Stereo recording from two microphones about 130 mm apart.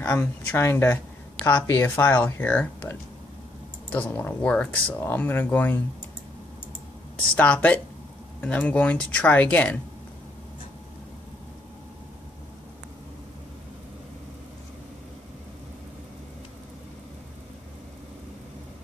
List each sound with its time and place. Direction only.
0.0 s speech: 15° left (ahead or behind)
7.3 s speech: 10° left (ahead or behind)